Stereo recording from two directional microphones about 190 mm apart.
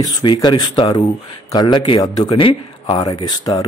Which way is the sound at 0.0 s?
25° left (ahead or behind).